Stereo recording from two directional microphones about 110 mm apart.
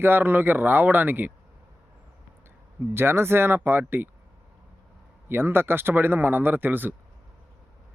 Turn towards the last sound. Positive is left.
turn(degrees=-20)  # may be behind; listen again after turning